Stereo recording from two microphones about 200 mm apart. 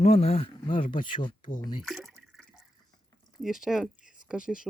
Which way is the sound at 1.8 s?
Centre (ahead or behind).